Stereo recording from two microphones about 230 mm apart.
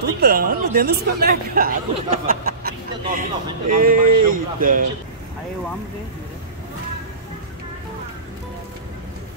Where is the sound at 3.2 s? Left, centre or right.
Right.